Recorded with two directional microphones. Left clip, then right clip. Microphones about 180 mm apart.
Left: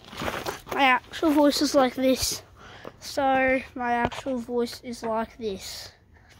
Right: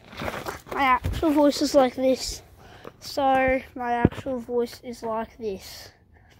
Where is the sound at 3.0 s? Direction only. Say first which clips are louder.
Right 1 dB; 10° right (ahead or behind).